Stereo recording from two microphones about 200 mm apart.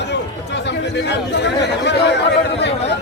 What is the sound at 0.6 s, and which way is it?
Chatter, 60° left (ahead or behind).